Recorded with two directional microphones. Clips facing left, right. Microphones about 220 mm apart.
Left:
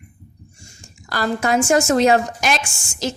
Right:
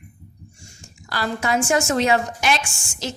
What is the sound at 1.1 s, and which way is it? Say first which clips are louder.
A woman's voice: left 3 dB; 45° left (ahead or behind).